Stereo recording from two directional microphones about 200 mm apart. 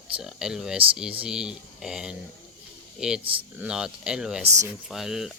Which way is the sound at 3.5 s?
5° right (ahead or behind).